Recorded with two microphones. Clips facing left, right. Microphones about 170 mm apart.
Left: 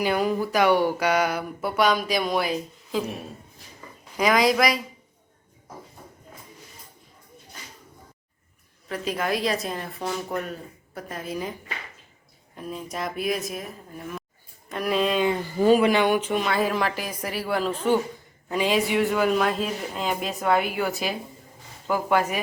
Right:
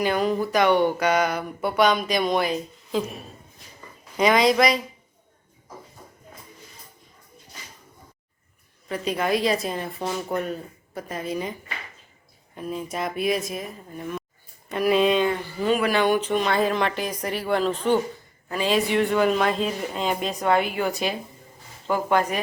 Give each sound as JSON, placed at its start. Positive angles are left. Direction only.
{"t": 0.0, "sound": "a sound", "side_deg": 10}
{"t": 4.2, "sound": "speech", "side_deg": 0}
{"t": 8.9, "sound": "speech", "side_deg": 0}
{"t": 12.5, "sound": "speech", "side_deg": 0}
{"t": 15.5, "sound": "speech", "side_deg": 40}
{"t": 15.8, "sound": "speech", "side_deg": 15}
{"t": 21.8, "sound": "a sound", "side_deg": 5}